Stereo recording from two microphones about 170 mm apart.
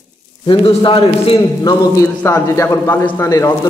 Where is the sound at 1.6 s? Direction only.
15° left (ahead or behind).